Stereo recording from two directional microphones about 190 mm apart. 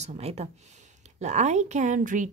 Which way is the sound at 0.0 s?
35° right (ahead or behind).